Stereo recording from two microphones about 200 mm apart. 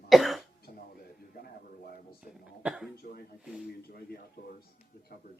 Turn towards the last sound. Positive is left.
turn(degrees=45)  # may be behind; listen again after turning